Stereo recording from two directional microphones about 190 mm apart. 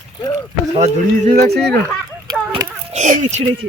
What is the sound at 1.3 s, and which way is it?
Speech, 55° right (ahead or behind).